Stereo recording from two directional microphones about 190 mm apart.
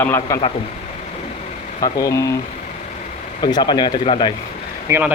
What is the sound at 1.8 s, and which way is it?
Speech, 15° left (ahead or behind).